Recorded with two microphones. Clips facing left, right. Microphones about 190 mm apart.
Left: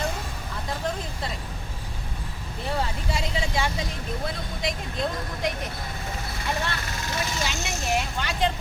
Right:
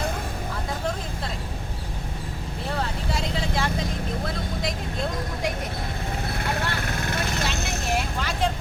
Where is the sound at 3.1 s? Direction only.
Centre (ahead or behind).